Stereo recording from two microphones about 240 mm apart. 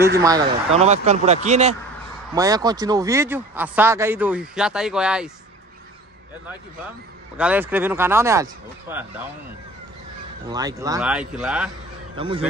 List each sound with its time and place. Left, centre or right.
0.2 s speech: centre
2.3 s speech: centre
7.3 s speech: centre
10.5 s speech: centre
11.0 s speech: centre